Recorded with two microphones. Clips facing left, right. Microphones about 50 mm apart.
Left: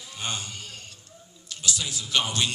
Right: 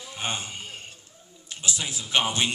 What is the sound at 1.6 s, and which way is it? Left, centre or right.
Speech, right.